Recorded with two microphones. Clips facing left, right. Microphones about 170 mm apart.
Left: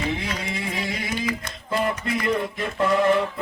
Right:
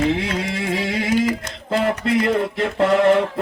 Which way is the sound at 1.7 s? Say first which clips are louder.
Right 6 dB; 75° right (ahead or behind).